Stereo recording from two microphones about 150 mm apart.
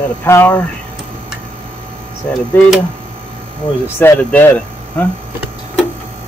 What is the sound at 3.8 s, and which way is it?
Speech, 15° left (ahead or behind).